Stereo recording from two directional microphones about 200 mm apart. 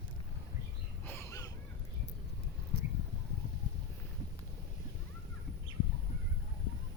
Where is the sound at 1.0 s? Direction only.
10° left (ahead or behind).